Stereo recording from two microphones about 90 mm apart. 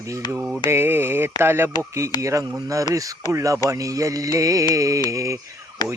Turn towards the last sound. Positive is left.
turn(degrees=50)  # may be behind; listen again after turning